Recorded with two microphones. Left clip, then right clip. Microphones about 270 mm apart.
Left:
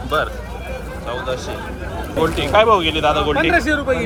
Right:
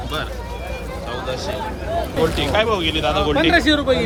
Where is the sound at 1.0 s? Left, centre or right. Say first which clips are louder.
Left 2 dB; centre.